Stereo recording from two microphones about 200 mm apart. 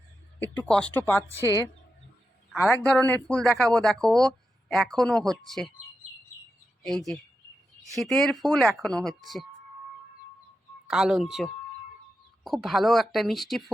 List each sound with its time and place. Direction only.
0.3 s speech: 10° left (ahead or behind)
2.6 s speech: 5° left (ahead or behind)
6.8 s speech: centre (ahead or behind)
10.8 s speech: 5° right (ahead or behind)